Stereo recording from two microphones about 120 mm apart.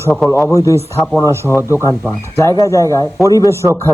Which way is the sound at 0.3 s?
25° left (ahead or behind).